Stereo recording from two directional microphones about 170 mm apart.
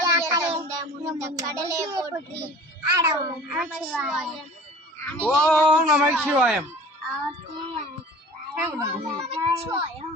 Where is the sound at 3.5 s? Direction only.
5° right (ahead or behind).